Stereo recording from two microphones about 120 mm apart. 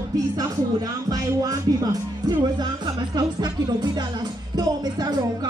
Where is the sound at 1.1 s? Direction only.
30° right (ahead or behind).